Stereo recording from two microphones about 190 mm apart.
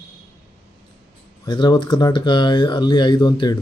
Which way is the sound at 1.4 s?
20° left (ahead or behind).